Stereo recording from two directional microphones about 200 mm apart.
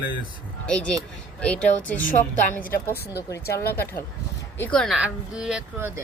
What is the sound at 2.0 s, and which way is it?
Speech, 40° left (ahead or behind).